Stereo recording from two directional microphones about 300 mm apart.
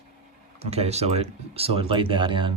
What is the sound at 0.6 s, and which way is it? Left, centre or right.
Speech, right.